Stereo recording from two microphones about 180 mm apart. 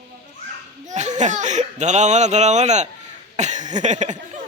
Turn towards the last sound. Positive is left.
turn(degrees=-40)  # may be behind; listen again after turning